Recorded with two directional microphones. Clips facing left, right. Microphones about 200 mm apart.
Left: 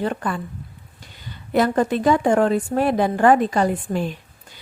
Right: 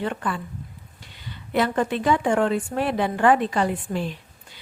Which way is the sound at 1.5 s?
40° left (ahead or behind).